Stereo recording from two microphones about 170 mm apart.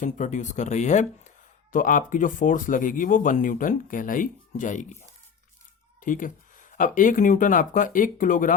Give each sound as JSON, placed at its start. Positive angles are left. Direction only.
{"t": 0.0, "sound": "speech", "side_deg": 45}
{"t": 6.0, "sound": "speech", "side_deg": 50}